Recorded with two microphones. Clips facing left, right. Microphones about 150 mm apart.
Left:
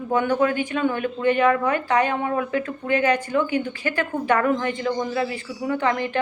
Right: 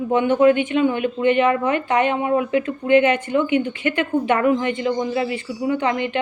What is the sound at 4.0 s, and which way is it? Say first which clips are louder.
Speech: right 2 dB; 20° right (ahead or behind).